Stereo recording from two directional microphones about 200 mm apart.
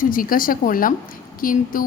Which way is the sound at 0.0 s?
45° left (ahead or behind).